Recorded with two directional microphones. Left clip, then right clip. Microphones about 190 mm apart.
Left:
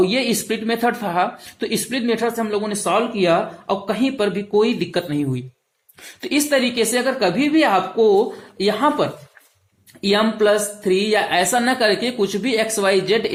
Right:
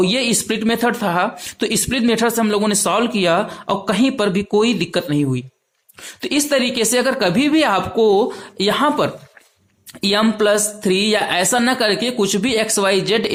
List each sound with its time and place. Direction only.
0.0 s speech: 30° right (ahead or behind)